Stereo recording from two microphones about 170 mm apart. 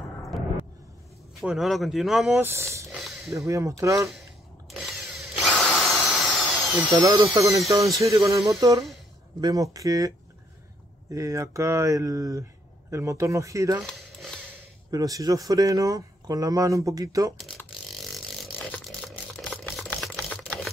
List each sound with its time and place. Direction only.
0.3 s vehicle: centre (ahead or behind)
1.4 s speech: centre (ahead or behind)
2.9 s a sound: centre (ahead or behind)
3.3 s speech: 20° right (ahead or behind)
4.6 s drill: centre (ahead or behind)
7.0 s speech: 20° right (ahead or behind)
13.8 s a sound: centre (ahead or behind)
14.9 s speech: 20° right (ahead or behind)
18.7 s typewriter: centre (ahead or behind)
19.9 s typing: centre (ahead or behind)